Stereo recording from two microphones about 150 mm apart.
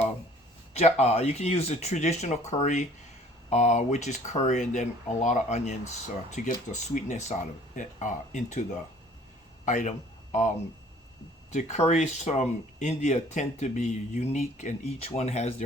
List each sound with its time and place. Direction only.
0.7 s a man's voice: 45° left (ahead or behind)
11.5 s speech: 50° left (ahead or behind)